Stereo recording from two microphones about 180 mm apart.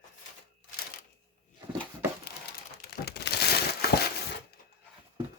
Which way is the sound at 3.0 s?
65° left (ahead or behind).